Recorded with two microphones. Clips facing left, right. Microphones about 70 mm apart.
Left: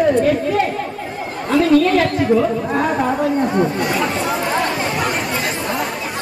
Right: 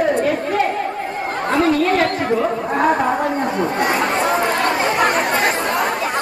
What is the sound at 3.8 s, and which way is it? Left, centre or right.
Chatter, right.